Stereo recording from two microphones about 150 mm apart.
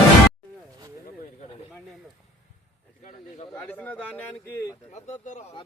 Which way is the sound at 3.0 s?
55° left (ahead or behind).